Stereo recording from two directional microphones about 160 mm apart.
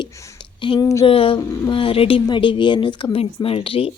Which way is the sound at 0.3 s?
30° left (ahead or behind).